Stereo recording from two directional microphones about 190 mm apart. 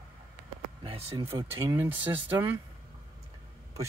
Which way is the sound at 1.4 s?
15° right (ahead or behind).